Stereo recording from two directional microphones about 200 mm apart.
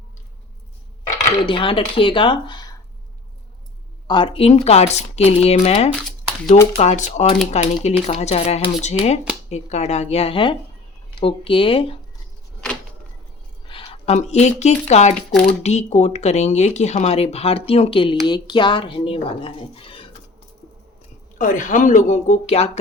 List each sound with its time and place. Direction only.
1.5 s speech: 25° left (ahead or behind)
4.0 s speech: 25° left (ahead or behind)
13.7 s speech: 25° left (ahead or behind)
21.3 s speech: 40° left (ahead or behind)